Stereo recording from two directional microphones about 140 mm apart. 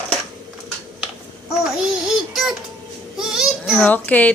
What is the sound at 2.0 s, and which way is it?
Child singing, 5° right (ahead or behind).